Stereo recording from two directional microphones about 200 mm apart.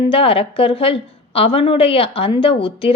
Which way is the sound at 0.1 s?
30° left (ahead or behind).